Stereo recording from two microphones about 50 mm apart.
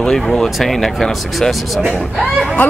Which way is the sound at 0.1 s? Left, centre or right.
Centre.